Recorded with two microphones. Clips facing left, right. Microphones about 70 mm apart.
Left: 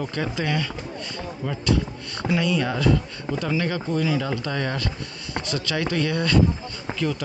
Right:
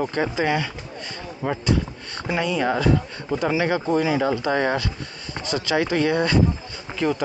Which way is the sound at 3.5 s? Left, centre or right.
Right.